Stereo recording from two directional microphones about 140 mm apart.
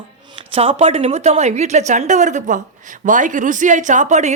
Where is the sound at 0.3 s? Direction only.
40° right (ahead or behind).